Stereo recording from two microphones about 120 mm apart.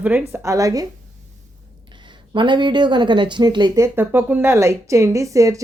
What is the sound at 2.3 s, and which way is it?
Speech, 40° right (ahead or behind).